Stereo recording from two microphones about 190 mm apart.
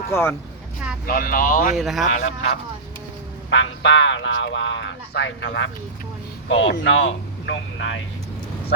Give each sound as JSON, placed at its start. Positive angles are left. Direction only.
{"t": 0.1, "sound": "speech", "side_deg": 10}
{"t": 1.0, "sound": "speech", "side_deg": 50}
{"t": 1.7, "sound": "speech", "side_deg": 0}
{"t": 2.0, "sound": "speech", "side_deg": 40}
{"t": 3.5, "sound": "speech", "side_deg": 75}